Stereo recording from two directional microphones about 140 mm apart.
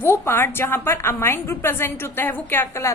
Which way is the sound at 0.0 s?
15° left (ahead or behind).